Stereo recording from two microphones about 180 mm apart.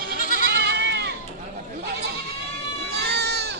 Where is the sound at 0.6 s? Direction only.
70° right (ahead or behind).